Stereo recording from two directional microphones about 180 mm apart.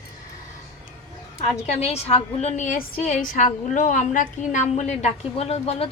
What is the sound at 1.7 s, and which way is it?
A woman's voice, 35° left (ahead or behind).